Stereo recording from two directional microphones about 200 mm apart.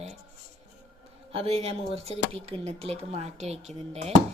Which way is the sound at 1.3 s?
30° right (ahead or behind).